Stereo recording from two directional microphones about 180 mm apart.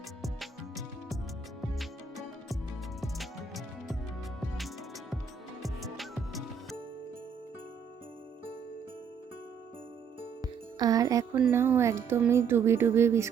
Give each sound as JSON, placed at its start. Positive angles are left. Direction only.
{"t": 0.2, "sound": "music", "side_deg": 0}
{"t": 5.6, "sound": "music", "side_deg": 0}
{"t": 10.4, "sound": "music", "side_deg": -20}
{"t": 11.3, "sound": "speech", "side_deg": -10}